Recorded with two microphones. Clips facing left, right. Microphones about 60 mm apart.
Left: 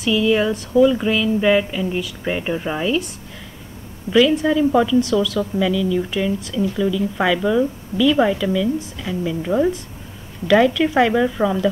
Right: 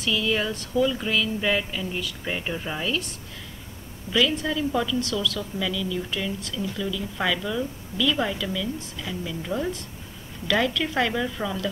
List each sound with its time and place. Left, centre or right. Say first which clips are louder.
0.0 s speech: left 8 dB; centre
4.1 s speech: left 9 dB; centre